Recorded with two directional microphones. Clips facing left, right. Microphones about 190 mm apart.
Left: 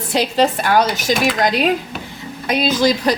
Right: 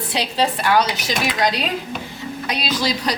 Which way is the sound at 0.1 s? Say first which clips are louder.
Left 6 dB; 45° left (ahead or behind).